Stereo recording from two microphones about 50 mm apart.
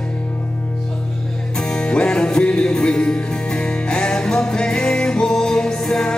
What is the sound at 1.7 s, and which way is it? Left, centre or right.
Music, centre.